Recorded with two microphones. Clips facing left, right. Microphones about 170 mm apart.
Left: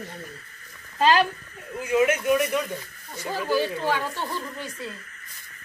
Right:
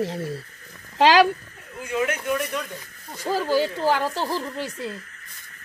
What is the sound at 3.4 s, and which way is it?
Speech, 40° right (ahead or behind).